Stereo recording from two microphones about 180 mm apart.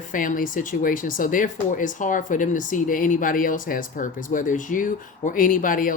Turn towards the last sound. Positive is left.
turn(degrees=50)  # may be behind; listen again after turning